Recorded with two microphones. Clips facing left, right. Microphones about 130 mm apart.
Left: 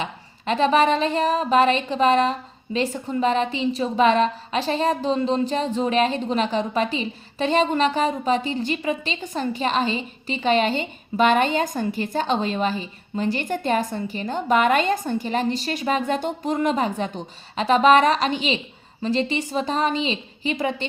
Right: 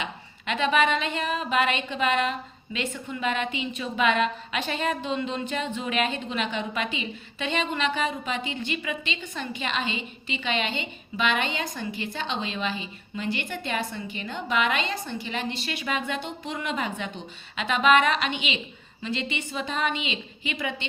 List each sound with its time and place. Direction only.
0.0 s speech: 35° left (ahead or behind)